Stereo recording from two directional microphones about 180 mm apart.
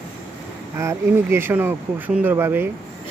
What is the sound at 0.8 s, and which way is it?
Speech, 15° right (ahead or behind).